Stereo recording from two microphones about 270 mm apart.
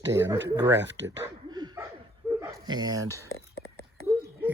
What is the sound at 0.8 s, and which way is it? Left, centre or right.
Speech, right.